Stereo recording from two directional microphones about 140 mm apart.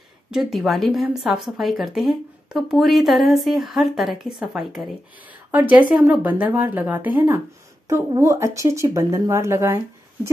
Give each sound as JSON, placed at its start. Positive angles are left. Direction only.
{"t": 0.3, "sound": "a woman's voice", "side_deg": 0}